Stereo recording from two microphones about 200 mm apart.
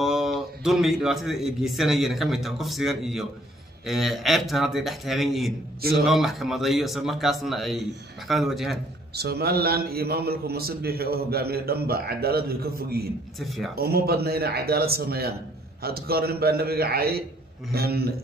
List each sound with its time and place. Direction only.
0.0 s speech: centre (ahead or behind)
9.1 s a man's voice: 50° right (ahead or behind)
13.4 s speech: centre (ahead or behind)
13.7 s a man's voice: 50° right (ahead or behind)